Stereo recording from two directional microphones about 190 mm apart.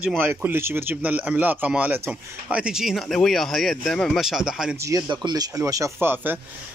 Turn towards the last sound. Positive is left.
turn(degrees=-10)  # may be behind; listen again after turning